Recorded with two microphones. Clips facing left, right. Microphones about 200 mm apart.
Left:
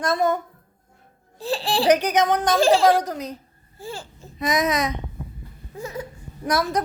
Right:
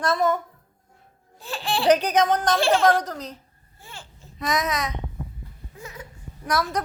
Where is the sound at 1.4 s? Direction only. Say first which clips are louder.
Left 4 dB; 35° left (ahead or behind).